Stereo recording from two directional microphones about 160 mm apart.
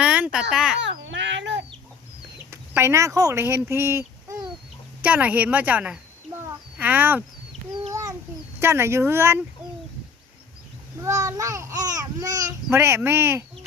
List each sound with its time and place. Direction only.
0.0 s a sound: 5° right (ahead or behind)
0.5 s a child's voice: 5° right (ahead or behind)
1.1 s a sound: 90° right
2.5 s a woman's voice: 15° right (ahead or behind)
8.5 s a woman's voice: 15° right (ahead or behind)
11.0 s a child's voice: 20° right (ahead or behind)